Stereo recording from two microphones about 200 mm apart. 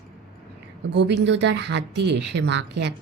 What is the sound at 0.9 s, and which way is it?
Speech, 60° right (ahead or behind).